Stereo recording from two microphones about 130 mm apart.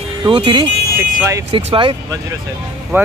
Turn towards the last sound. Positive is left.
turn(degrees=-15)  # may be behind; listen again after turning